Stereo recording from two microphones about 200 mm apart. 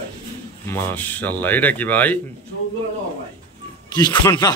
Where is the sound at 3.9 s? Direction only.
20° left (ahead or behind).